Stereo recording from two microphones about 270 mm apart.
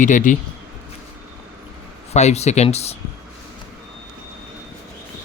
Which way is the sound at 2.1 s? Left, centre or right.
Left.